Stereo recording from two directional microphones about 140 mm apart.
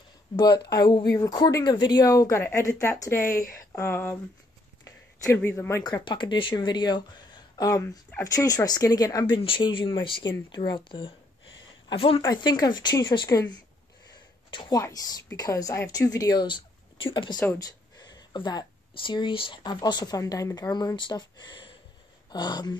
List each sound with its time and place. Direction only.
0.4 s speech: 30° left (ahead or behind); by 4.2 s 15° left (ahead or behind)
5.3 s speech: 15° left (ahead or behind)
14.1 s a sound: 35° left (ahead or behind)
14.8 s speech: 25° left (ahead or behind)